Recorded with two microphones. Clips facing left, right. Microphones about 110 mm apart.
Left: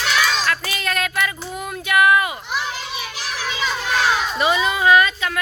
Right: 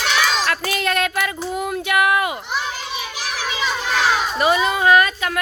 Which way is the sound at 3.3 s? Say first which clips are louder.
Right 1 dB; 15° right (ahead or behind).